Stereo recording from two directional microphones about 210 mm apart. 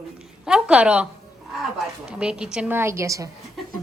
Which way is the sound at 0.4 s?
5° right (ahead or behind).